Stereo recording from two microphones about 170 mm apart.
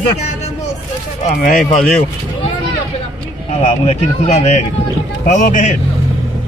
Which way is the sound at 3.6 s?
40° left (ahead or behind).